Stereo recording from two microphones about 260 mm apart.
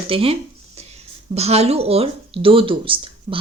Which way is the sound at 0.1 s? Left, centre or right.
Right.